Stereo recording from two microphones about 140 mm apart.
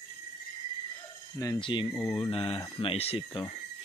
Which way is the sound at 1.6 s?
35° left (ahead or behind).